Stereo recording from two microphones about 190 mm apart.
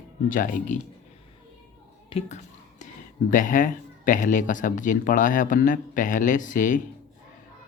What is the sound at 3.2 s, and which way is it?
Speech, 45° left (ahead or behind).